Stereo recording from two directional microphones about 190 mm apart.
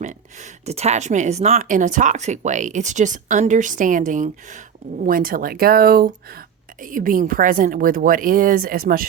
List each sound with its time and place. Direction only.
0.0 s a woman's voice: 40° right (ahead or behind)